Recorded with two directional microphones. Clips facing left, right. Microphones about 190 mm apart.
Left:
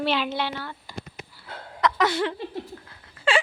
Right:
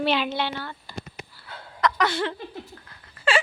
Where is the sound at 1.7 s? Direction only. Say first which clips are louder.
Left 1 dB; 20° left (ahead or behind).